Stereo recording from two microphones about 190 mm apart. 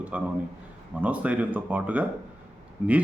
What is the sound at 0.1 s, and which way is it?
Speech, 5° right (ahead or behind).